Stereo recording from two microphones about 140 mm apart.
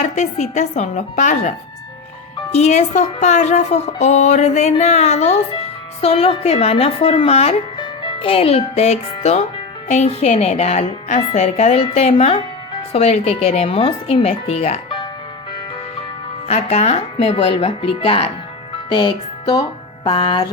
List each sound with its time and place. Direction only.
0.0 s a woman's voice: 55° left (ahead or behind); by 15.0 s 40° left (ahead or behind)
16.5 s speech: 55° left (ahead or behind); by 19.6 s 30° left (ahead or behind)
20.1 s music: 40° left (ahead or behind)